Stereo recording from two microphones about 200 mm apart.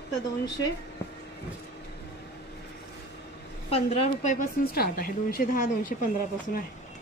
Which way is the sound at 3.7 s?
30° left (ahead or behind).